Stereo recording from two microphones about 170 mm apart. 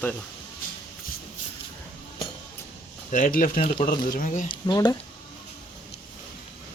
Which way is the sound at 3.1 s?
50° left (ahead or behind).